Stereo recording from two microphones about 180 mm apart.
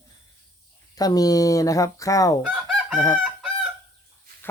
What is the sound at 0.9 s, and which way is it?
Speech, 20° left (ahead or behind).